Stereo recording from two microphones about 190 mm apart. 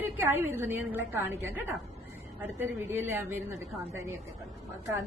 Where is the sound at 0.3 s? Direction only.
10° right (ahead or behind).